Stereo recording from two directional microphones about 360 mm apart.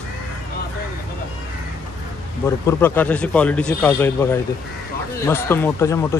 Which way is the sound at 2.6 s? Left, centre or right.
Centre.